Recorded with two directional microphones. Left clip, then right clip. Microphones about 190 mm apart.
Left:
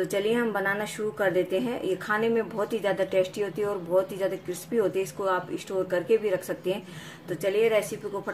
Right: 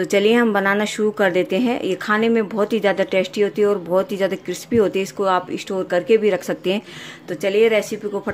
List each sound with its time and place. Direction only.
0.0 s speech: 45° right (ahead or behind)